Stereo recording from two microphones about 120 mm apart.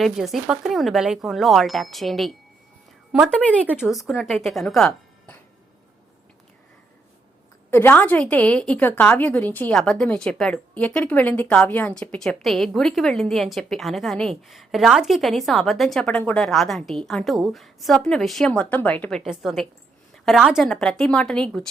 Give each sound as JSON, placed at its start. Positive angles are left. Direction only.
{"t": 0.0, "sound": "a woman's voice", "side_deg": 0}
{"t": 3.7, "sound": "a woman's voice", "side_deg": -5}
{"t": 7.7, "sound": "a woman's voice", "side_deg": 15}
{"t": 19.2, "sound": "a woman's voice", "side_deg": 0}